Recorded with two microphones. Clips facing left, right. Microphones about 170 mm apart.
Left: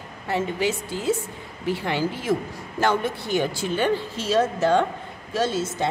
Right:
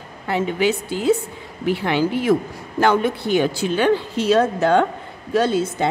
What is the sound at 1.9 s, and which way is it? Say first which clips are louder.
A woman's voice: right 7 dB; 65° right (ahead or behind).